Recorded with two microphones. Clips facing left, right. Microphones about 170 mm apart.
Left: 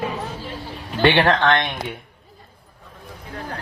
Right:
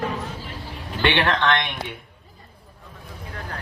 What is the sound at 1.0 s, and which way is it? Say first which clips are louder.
Speech: left 5 dB; 40° left (ahead or behind).